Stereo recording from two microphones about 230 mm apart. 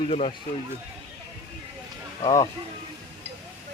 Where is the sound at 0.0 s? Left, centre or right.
Left.